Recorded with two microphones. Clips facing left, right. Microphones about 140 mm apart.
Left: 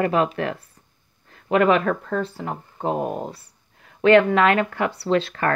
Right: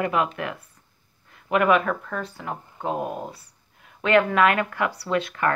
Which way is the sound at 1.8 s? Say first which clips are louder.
Left 5 dB; 35° left (ahead or behind).